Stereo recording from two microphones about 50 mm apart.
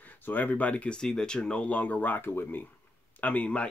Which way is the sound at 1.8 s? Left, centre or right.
Left.